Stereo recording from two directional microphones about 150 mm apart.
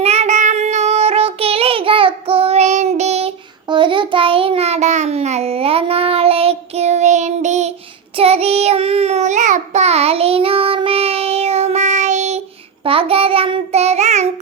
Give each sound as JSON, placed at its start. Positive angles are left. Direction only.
{"t": 0.0, "sound": "child singing", "side_deg": -45}
{"t": 3.7, "sound": "child singing", "side_deg": -30}
{"t": 12.8, "sound": "child singing", "side_deg": -40}